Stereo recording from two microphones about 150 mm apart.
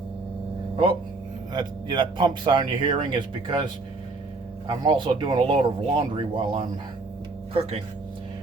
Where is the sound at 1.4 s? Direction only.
30° right (ahead or behind).